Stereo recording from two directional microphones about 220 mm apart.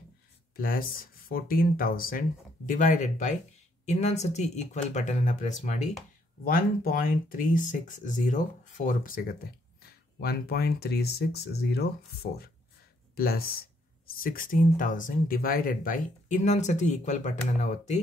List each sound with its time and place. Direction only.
0.6 s speech: 40° left (ahead or behind)